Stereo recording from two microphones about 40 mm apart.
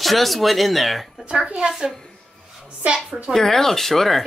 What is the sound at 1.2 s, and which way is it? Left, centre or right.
Speech, right.